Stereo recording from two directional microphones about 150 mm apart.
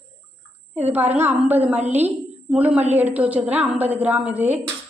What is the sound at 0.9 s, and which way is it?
A woman's voice, 10° right (ahead or behind).